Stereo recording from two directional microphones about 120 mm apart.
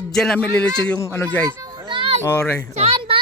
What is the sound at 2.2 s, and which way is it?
Speech, 20° left (ahead or behind).